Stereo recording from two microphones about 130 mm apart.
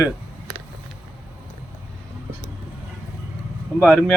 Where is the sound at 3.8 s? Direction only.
5° left (ahead or behind).